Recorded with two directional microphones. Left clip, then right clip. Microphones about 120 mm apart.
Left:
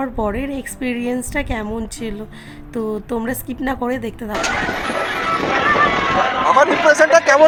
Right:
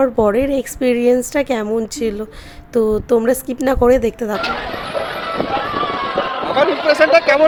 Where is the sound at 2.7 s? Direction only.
30° right (ahead or behind).